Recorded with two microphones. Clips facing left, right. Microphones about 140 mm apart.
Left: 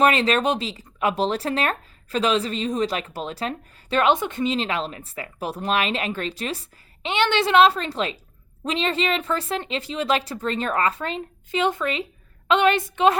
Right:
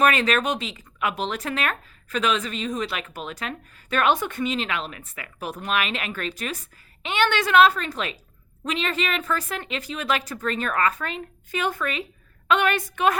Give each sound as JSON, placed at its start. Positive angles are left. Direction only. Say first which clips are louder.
{"t": 0.0, "sound": "speech", "louder": "left 2 dB", "side_deg": 25}